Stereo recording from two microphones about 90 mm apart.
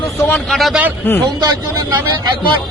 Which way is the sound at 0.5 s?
Centre (ahead or behind).